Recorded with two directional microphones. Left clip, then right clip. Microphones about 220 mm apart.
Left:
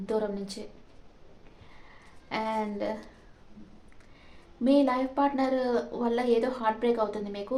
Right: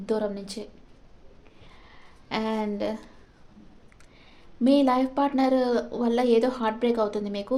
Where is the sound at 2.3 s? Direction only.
50° right (ahead or behind).